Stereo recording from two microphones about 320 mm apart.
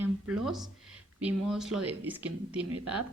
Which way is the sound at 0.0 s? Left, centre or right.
Centre.